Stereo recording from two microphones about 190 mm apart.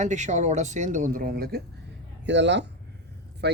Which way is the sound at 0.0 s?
40° right (ahead or behind).